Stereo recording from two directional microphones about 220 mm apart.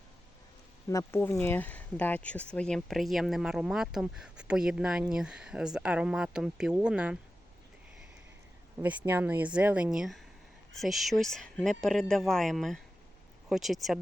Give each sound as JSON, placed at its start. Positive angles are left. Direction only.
{"t": 0.9, "sound": "speech", "side_deg": 10}
{"t": 8.8, "sound": "speech", "side_deg": -5}